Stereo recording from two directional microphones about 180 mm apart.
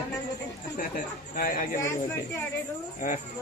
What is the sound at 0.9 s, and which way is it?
Speech, 50° left (ahead or behind).